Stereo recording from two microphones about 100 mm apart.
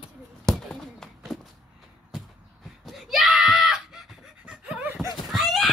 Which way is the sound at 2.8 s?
Centre (ahead or behind).